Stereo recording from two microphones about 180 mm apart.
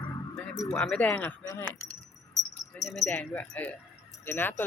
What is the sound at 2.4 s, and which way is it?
Keys jangling, 75° left (ahead or behind).